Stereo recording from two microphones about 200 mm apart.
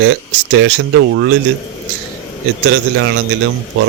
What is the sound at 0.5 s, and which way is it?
Speech, 65° right (ahead or behind).